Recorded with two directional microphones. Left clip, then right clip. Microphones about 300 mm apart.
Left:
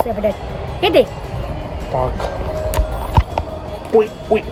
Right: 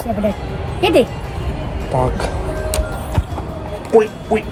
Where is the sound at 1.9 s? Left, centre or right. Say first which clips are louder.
Right 1 dB; right.